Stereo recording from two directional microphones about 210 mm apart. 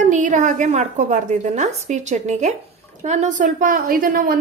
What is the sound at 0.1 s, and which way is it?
A woman's voice, 35° right (ahead or behind).